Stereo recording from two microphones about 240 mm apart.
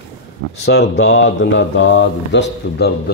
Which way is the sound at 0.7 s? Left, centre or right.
Left.